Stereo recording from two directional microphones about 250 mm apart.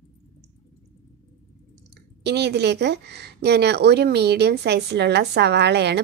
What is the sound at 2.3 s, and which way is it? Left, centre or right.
Speech, right.